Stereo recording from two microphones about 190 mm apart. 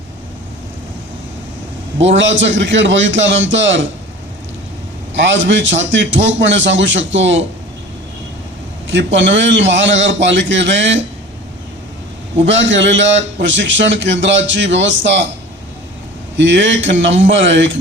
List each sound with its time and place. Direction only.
2.0 s a man's voice: 75° right (ahead or behind)
5.1 s a man's voice: 75° right (ahead or behind)
8.9 s a man's voice: 75° right (ahead or behind)
12.4 s a man's voice: 75° right (ahead or behind)
16.4 s a man's voice: 75° right (ahead or behind)